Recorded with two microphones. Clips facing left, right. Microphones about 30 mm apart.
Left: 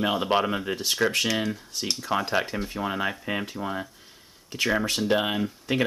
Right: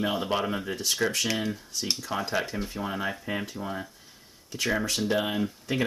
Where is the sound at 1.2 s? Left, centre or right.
Centre.